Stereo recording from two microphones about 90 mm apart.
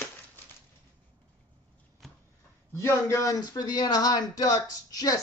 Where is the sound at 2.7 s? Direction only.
30° left (ahead or behind).